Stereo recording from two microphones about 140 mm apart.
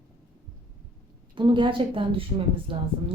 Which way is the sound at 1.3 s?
35° right (ahead or behind).